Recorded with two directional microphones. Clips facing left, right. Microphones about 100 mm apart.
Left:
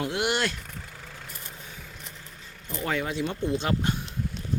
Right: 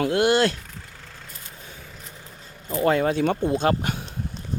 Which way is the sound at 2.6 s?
45° right (ahead or behind).